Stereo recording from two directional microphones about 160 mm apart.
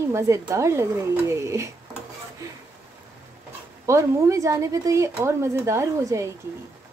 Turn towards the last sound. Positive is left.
turn(degrees=-20)  # may be behind; listen again after turning